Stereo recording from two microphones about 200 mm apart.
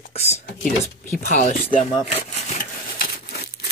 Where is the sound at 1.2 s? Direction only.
40° left (ahead or behind).